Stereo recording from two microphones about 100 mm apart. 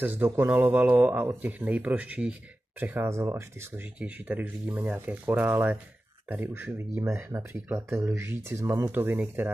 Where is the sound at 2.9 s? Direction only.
25° right (ahead or behind).